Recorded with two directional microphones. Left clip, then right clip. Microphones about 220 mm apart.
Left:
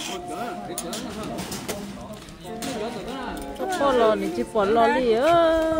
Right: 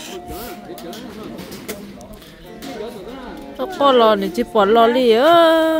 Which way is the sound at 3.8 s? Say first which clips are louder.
Right 7 dB; 35° right (ahead or behind).